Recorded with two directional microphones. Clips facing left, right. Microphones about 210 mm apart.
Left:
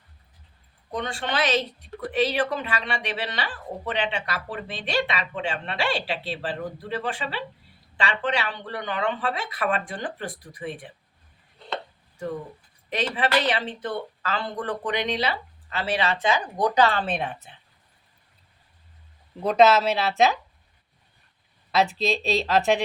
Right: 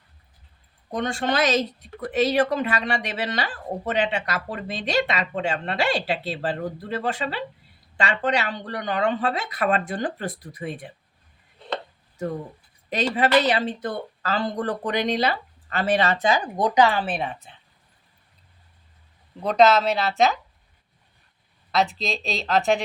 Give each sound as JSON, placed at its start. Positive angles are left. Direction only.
{"t": 0.9, "sound": "speech", "side_deg": -45}
{"t": 12.9, "sound": "speech", "side_deg": -40}
{"t": 16.6, "sound": "speech", "side_deg": -15}
{"t": 17.1, "sound": "speech", "side_deg": 0}
{"t": 19.4, "sound": "speech", "side_deg": 5}
{"t": 21.7, "sound": "speech", "side_deg": 0}